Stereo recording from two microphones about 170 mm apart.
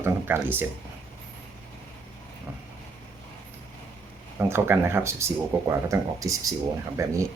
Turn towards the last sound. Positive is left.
turn(degrees=-20)  # may be behind; listen again after turning